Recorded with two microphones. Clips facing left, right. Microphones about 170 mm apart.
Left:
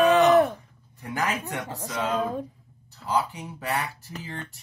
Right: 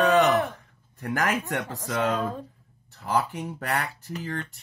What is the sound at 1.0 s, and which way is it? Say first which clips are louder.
Speech: right 2 dB; 60° right (ahead or behind).